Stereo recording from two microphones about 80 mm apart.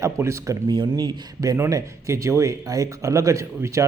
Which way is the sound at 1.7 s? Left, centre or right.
Right.